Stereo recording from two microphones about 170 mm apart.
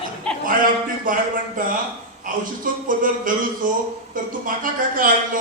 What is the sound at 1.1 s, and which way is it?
A man's voice, 55° right (ahead or behind).